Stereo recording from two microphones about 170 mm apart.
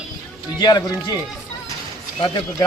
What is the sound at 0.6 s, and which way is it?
Speech, 25° left (ahead or behind).